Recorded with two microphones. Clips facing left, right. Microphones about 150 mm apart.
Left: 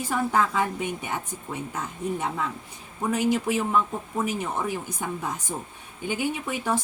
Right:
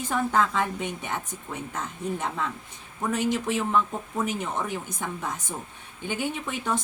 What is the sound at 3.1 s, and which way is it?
A woman's voice, 10° left (ahead or behind).